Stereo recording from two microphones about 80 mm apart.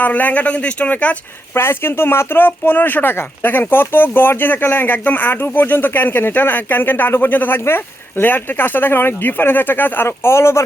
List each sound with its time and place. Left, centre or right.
0.0 s speech: centre
1.5 s speech: left